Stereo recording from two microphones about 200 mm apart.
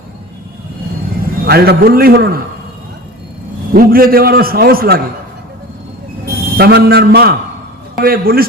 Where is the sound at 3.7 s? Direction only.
45° right (ahead or behind).